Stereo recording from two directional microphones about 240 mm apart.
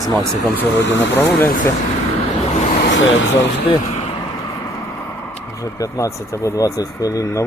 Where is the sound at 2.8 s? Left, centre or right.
Left.